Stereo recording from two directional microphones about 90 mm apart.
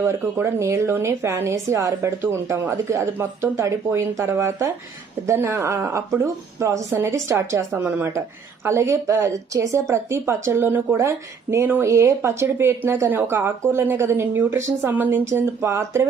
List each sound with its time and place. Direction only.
0.0 s a woman's voice: 25° right (ahead or behind)
8.6 s a woman's voice: 30° right (ahead or behind)